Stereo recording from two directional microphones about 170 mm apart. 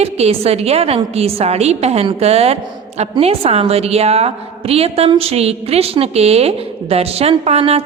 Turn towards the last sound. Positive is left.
turn(degrees=-35)  # may be behind; listen again after turning